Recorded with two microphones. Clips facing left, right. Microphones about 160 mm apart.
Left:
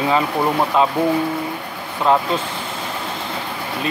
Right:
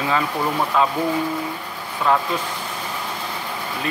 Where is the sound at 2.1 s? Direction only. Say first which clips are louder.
Left 3 dB; 20° left (ahead or behind).